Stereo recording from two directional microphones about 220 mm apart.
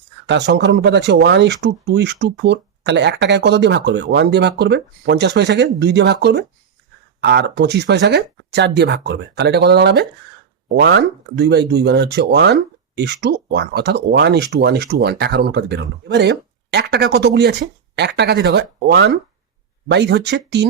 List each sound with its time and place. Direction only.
0.3 s speech: 50° right (ahead or behind)